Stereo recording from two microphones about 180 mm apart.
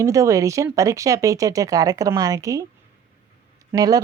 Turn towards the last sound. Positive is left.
turn(degrees=-20)  # may be behind; listen again after turning